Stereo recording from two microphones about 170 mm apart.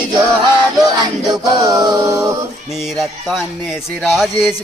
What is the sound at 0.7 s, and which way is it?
Music, 25° right (ahead or behind).